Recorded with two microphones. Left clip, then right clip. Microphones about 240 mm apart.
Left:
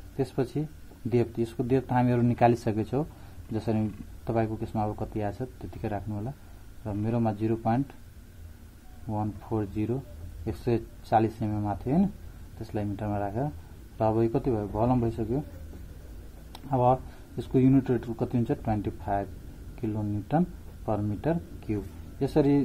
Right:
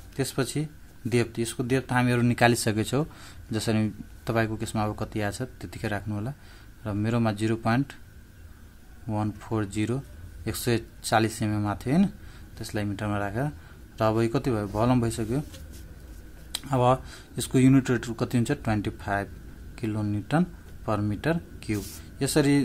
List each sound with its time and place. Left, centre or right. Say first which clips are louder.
0.2 s speech: right 1 dB; centre
9.1 s speech: right 2 dB; right
16.5 s speech: right 1 dB; centre
19.7 s a sound: right 1 dB; centre
20.0 s speech: right 1 dB; centre